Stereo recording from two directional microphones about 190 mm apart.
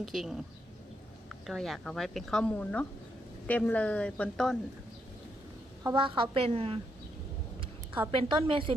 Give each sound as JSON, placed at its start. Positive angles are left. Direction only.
{"t": 0.0, "sound": "a woman's voice", "side_deg": 0}
{"t": 5.8, "sound": "a woman's voice", "side_deg": -25}
{"t": 8.1, "sound": "a woman's voice", "side_deg": -25}